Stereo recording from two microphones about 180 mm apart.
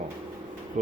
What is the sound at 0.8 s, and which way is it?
Speech, 45° right (ahead or behind).